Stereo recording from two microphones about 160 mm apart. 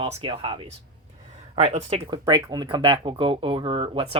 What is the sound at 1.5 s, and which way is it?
Speech, 45° right (ahead or behind).